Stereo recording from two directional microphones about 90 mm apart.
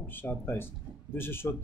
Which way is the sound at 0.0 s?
20° left (ahead or behind).